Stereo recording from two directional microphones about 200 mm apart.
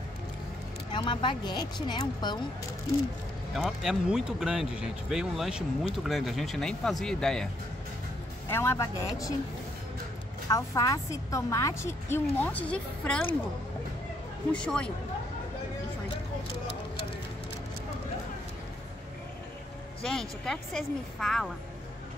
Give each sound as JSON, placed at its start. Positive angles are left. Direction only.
{"t": 0.9, "sound": "speech", "side_deg": 25}
{"t": 3.5, "sound": "speech", "side_deg": 0}
{"t": 8.5, "sound": "a woman's voice", "side_deg": 10}
{"t": 10.5, "sound": "a woman's voice", "side_deg": 15}
{"t": 14.5, "sound": "speech", "side_deg": 5}
{"t": 20.0, "sound": "a woman's voice", "side_deg": 0}